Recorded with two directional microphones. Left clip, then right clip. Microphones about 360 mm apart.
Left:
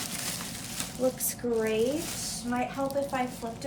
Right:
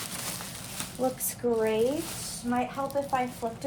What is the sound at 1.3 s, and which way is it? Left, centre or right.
A woman's voice, centre.